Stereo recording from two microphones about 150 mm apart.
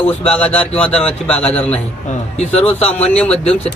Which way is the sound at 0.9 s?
45° left (ahead or behind).